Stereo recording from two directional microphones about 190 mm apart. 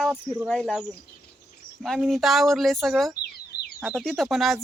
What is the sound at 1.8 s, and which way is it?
Speech, centre (ahead or behind).